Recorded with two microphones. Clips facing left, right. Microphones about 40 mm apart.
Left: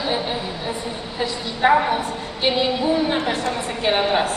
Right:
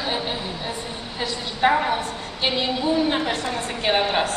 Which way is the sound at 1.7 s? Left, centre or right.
Centre.